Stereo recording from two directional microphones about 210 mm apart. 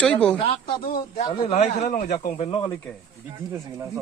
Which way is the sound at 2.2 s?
25° left (ahead or behind).